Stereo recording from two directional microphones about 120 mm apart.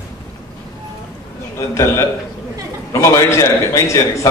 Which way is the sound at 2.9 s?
25° left (ahead or behind).